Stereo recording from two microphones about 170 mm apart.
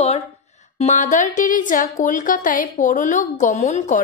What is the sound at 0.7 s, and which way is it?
A woman's voice, 45° left (ahead or behind).